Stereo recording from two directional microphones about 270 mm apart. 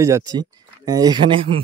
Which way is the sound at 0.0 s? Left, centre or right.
Centre.